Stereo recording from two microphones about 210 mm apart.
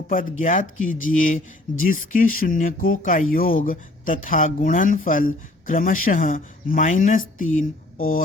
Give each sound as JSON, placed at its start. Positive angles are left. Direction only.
{"t": 0.1, "sound": "speech", "side_deg": 40}